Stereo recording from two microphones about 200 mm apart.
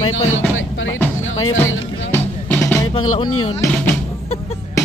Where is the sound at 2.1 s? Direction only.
10° left (ahead or behind).